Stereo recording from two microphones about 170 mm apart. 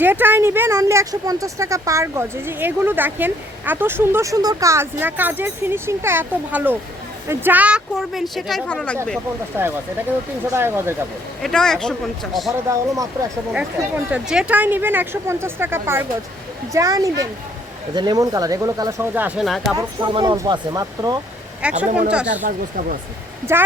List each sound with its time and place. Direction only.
0.0 s speech: 10° right (ahead or behind); by 9.0 s 5° left (ahead or behind)
9.5 s speech: 15° right (ahead or behind)
11.4 s speech: 5° left (ahead or behind)
12.5 s speech: 20° right (ahead or behind)
13.5 s speech: 5° right (ahead or behind)
19.5 s speech: centre (ahead or behind)
19.7 s speech: 25° right (ahead or behind)
21.6 s speech: 5° right (ahead or behind)
22.4 s speech: 60° right (ahead or behind)